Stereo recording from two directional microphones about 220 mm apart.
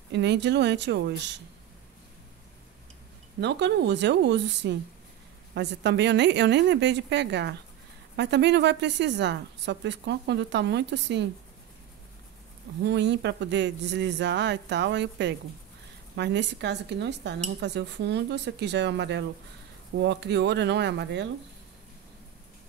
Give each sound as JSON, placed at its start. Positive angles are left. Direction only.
{"t": 0.1, "sound": "a woman's voice", "side_deg": -50}
{"t": 3.3, "sound": "a woman's voice", "side_deg": -50}
{"t": 12.8, "sound": "a woman's voice", "side_deg": -50}